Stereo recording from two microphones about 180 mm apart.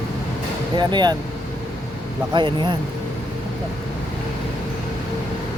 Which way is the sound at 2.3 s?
25° right (ahead or behind).